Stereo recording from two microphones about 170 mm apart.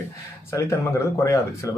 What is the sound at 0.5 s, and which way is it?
Speech, 20° left (ahead or behind).